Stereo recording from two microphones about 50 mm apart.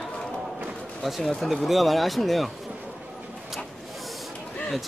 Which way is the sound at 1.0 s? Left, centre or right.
Centre.